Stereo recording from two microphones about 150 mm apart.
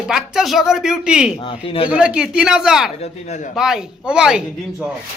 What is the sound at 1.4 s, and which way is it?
Speech, 35° left (ahead or behind).